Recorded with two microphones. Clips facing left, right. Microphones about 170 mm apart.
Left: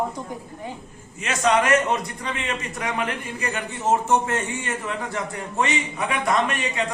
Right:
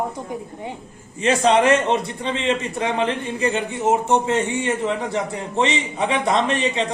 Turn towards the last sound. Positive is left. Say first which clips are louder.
# right 4 dB
turn(degrees=-25)  # may be behind; listen again after turning